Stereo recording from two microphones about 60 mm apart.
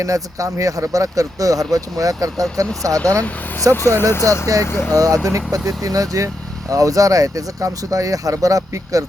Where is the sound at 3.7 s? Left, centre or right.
Left.